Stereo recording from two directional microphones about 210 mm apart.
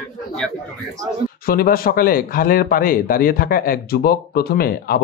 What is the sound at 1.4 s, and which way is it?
Speech, 45° left (ahead or behind).